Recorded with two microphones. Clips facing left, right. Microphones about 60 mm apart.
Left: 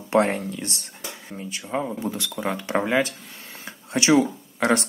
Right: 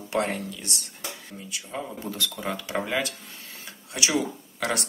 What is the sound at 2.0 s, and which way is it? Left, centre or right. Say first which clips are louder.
Speech: left 4 dB; centre.